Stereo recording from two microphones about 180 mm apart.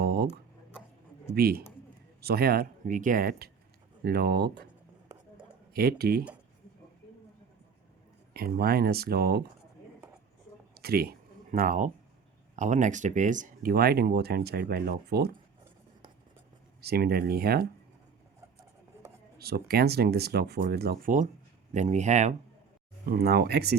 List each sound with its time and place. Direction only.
0.0 s a sound: 60° right (ahead or behind)
1.4 s speech: 55° right (ahead or behind)
5.7 s speech: 60° right (ahead or behind)
8.3 s speech: 55° right (ahead or behind)
10.8 s speech: 60° right (ahead or behind)
16.8 s speech: 60° right (ahead or behind)
19.4 s speech: 60° right (ahead or behind); by 22.4 s 40° right (ahead or behind)
23.0 s speech: 60° right (ahead or behind)